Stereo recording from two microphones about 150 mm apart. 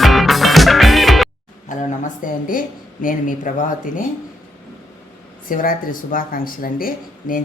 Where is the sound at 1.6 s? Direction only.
60° left (ahead or behind).